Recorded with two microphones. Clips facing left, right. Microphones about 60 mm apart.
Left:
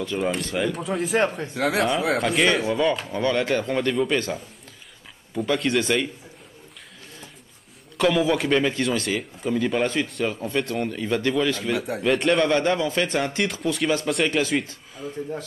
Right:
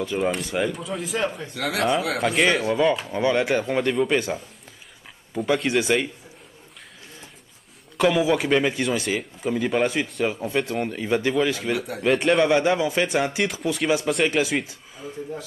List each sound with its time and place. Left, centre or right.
0.0 s a man's voice: centre
0.7 s speech: centre
1.2 s speech: left
1.8 s speech: centre
3.1 s a man's voice: centre
8.0 s a man's voice: centre